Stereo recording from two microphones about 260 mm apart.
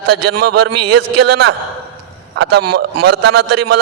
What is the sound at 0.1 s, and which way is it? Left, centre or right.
A man's voice, right.